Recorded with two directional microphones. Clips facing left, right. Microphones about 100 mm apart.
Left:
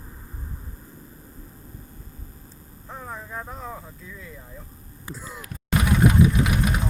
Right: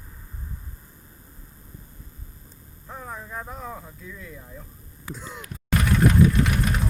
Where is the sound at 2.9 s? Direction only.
Centre (ahead or behind).